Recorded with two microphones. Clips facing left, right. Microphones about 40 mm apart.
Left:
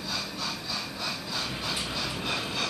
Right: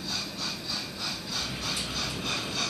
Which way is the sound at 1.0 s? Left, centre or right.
Centre.